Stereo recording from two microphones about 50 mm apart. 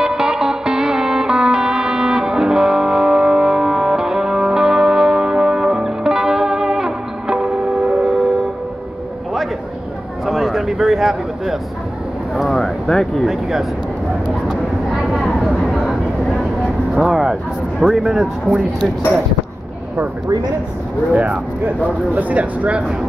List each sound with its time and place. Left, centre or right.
0.0 s music: centre
10.2 s a sound: centre
12.8 s speech: centre
15.0 s vehicle: centre
16.9 s speech: centre
21.1 s speech: right